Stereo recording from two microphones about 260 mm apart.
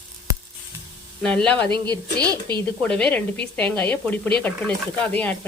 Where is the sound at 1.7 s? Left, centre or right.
Left.